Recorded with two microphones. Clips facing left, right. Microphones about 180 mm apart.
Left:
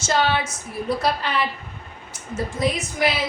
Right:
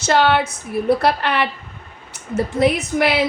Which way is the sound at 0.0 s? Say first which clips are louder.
Right 5 dB; 65° right (ahead or behind).